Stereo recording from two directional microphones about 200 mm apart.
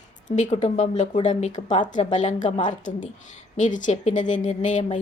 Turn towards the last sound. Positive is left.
turn(degrees=35)  # may be behind; listen again after turning